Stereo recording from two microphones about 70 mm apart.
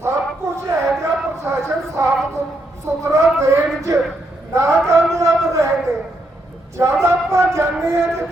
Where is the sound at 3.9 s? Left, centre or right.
Right.